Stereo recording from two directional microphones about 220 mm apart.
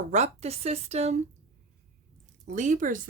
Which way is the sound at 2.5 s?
35° right (ahead or behind).